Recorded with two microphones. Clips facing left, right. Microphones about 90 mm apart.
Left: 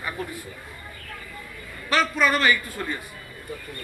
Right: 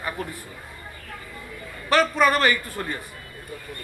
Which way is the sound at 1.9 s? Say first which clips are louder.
Right 3 dB; 45° right (ahead or behind).